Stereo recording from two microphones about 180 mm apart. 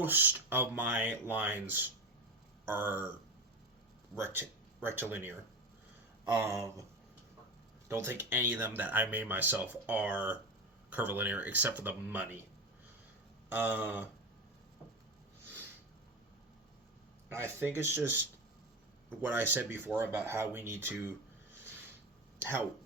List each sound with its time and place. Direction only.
0.0 s speech: 10° right (ahead or behind)
4.2 s speech: 10° right (ahead or behind)
6.3 s speech: 15° right (ahead or behind)
7.9 s speech: 10° right (ahead or behind)
13.5 s speech: 10° right (ahead or behind)
17.2 s speech: 15° right (ahead or behind)
22.4 s speech: 15° right (ahead or behind)